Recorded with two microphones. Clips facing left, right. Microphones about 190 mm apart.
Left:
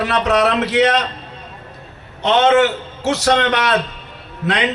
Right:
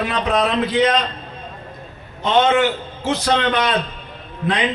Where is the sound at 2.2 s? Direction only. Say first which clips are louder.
Left 3 dB; 75° left (ahead or behind).